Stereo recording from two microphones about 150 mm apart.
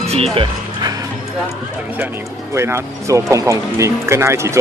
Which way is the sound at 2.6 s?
20° right (ahead or behind).